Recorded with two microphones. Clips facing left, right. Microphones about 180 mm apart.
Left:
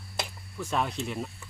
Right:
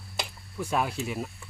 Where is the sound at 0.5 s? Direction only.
10° right (ahead or behind).